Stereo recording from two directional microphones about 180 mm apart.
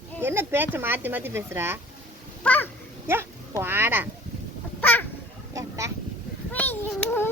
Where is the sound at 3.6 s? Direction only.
10° right (ahead or behind).